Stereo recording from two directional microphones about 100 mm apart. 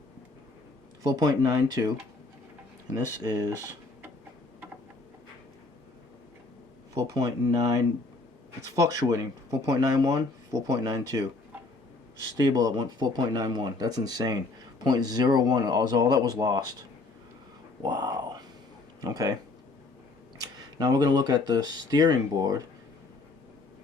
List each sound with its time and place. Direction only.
1.0 s speech: 40° right (ahead or behind)
6.9 s speech: 35° right (ahead or behind)
12.4 s speech: 40° right (ahead or behind)
17.8 s speech: 40° right (ahead or behind)
20.4 s speech: 40° right (ahead or behind)